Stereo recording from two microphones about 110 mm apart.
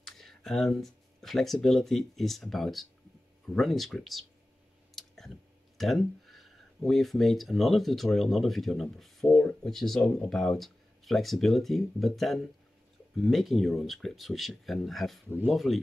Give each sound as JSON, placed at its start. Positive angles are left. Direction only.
{"t": 0.0, "sound": "speech", "side_deg": 5}
{"t": 4.9, "sound": "clicking", "side_deg": 5}
{"t": 5.8, "sound": "speech", "side_deg": 0}
{"t": 15.2, "sound": "speech", "side_deg": -20}
{"t": 15.5, "sound": "speech", "side_deg": 0}